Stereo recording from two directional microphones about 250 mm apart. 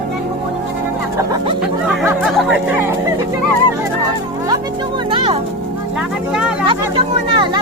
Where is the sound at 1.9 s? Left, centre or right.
Centre.